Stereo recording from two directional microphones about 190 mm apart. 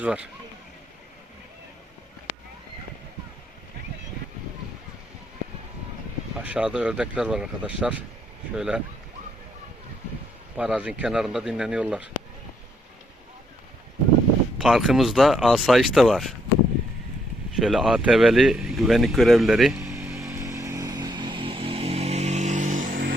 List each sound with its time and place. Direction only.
0.0 s speech: 5° right (ahead or behind)
6.4 s speech: 5° right (ahead or behind)
10.6 s speech: 5° right (ahead or behind)
14.6 s speech: centre (ahead or behind)
17.5 s speech: centre (ahead or behind)
20.1 s vehicle: 15° right (ahead or behind); by 23.0 s 45° right (ahead or behind)